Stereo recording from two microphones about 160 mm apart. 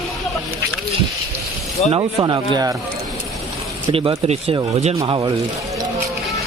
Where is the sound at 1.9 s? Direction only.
30° right (ahead or behind).